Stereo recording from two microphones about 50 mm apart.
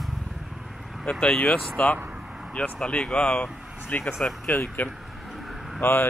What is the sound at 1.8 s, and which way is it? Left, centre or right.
A man's voice, left.